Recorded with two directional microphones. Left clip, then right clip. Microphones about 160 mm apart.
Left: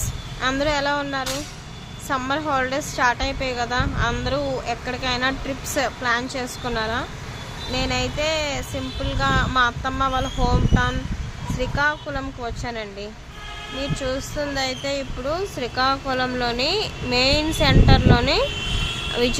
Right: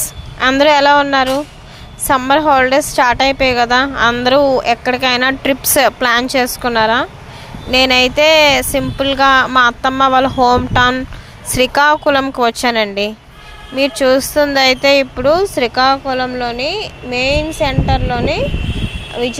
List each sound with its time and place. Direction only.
0.3 s a woman's voice: 60° right (ahead or behind)
7.7 s a woman's voice: 70° right (ahead or behind)
11.5 s speech: 90° right; by 19.4 s 10° right (ahead or behind)